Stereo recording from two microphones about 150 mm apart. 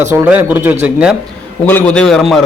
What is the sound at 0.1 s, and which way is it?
A man's voice, 15° right (ahead or behind).